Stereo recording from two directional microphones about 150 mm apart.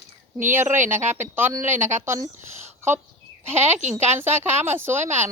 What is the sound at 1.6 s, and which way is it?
Speech, 55° right (ahead or behind).